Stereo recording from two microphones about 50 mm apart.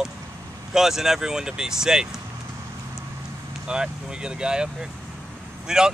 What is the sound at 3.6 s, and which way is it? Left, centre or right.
Speech, centre.